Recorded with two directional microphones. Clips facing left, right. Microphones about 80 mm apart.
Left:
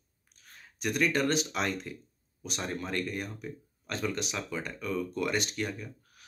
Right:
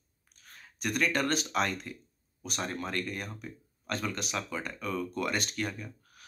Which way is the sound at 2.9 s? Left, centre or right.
Centre.